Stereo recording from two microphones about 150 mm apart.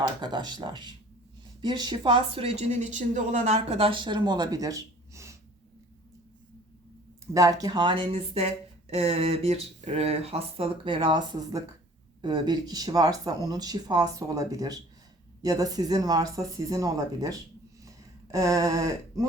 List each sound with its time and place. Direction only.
0.2 s speech: 30° right (ahead or behind)
7.3 s speech: 25° right (ahead or behind)
17.8 s a sound: 20° right (ahead or behind)